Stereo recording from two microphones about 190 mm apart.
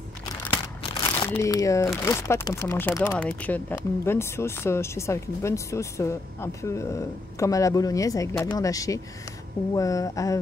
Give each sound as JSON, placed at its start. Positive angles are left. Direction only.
{"t": 1.2, "sound": "speech", "side_deg": 15}